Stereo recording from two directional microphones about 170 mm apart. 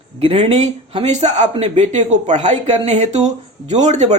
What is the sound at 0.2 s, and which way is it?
Speech, 35° right (ahead or behind).